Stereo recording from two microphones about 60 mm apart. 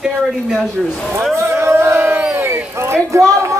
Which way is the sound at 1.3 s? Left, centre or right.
Right.